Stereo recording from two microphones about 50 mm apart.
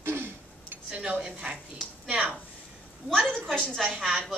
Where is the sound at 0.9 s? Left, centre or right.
Centre.